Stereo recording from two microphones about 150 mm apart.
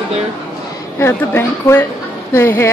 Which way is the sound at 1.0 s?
15° left (ahead or behind).